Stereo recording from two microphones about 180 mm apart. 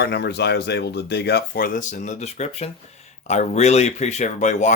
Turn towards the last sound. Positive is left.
turn(degrees=40)  # may be behind; listen again after turning